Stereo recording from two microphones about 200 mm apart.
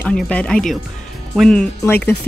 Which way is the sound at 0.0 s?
5° left (ahead or behind).